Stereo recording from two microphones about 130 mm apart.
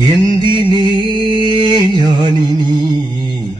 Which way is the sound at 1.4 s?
35° right (ahead or behind).